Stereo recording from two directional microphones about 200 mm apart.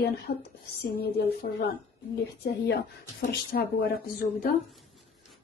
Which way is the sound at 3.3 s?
50° left (ahead or behind).